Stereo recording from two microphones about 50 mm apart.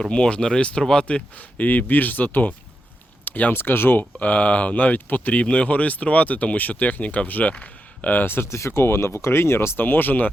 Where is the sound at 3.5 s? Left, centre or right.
Left.